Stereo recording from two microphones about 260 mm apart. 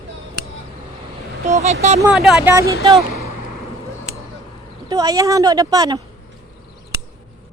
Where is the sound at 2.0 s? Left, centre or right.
Centre.